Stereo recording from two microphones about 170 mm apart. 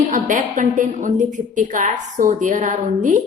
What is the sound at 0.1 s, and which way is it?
A woman's voice, 50° right (ahead or behind).